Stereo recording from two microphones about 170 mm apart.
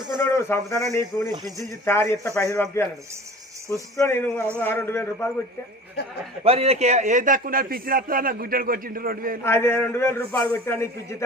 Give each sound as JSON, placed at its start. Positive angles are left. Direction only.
{"t": 0.2, "sound": "a man's voice", "side_deg": 15}
{"t": 3.9, "sound": "a man's voice", "side_deg": 15}
{"t": 6.4, "sound": "a man's voice", "side_deg": -35}
{"t": 9.4, "sound": "a man's voice", "side_deg": 15}